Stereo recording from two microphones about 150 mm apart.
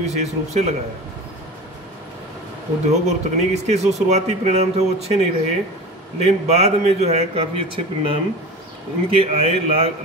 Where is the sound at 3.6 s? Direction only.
50° right (ahead or behind).